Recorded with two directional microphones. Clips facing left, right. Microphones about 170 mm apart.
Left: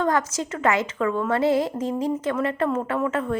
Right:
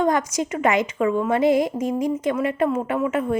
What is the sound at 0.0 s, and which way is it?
A woman's voice, 15° right (ahead or behind).